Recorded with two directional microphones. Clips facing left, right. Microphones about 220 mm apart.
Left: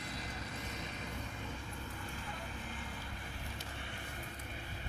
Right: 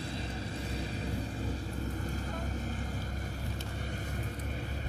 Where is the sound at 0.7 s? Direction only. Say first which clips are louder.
Right 8 dB; 35° right (ahead or behind).